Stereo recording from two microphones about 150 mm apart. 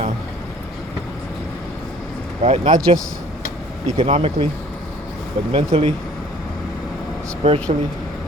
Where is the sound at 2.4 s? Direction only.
45° right (ahead or behind).